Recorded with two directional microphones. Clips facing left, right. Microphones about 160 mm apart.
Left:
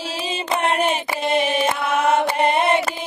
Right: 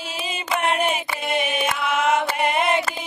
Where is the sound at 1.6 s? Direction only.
30° left (ahead or behind).